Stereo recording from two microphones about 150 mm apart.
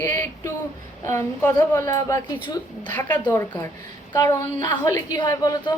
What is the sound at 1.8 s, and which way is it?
A woman's voice, 25° left (ahead or behind).